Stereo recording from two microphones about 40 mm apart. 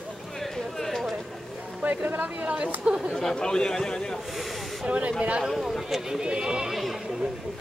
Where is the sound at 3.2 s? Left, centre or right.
Centre.